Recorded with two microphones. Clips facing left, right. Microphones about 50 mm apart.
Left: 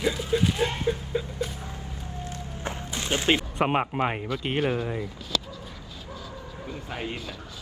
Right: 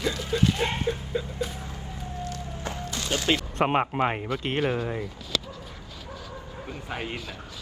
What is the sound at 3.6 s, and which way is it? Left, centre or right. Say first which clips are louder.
Speech: right 3 dB; centre.